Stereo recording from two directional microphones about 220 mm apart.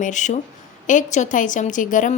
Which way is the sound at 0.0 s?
35° left (ahead or behind).